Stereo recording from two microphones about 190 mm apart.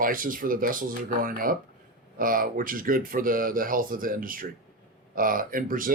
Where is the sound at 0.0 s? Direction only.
45° right (ahead or behind).